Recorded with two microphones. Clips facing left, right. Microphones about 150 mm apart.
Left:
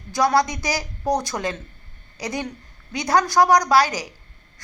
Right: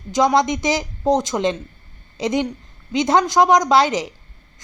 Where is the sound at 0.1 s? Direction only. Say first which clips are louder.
Right 3 dB; 20° right (ahead or behind).